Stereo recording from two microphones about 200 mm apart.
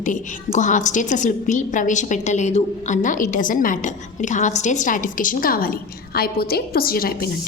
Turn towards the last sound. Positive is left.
turn(degrees=45)  # may be behind; listen again after turning